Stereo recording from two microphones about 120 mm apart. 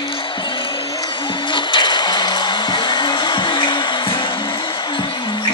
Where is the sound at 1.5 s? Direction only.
40° left (ahead or behind).